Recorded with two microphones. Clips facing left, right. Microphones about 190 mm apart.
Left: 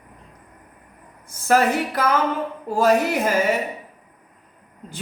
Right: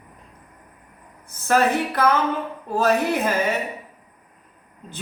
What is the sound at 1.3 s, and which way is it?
A woman's voice, 10° left (ahead or behind).